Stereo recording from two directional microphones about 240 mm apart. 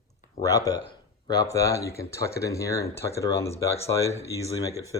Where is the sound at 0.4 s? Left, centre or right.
Centre.